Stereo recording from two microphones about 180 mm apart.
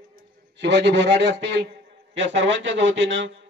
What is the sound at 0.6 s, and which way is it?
A man's voice, 75° right (ahead or behind).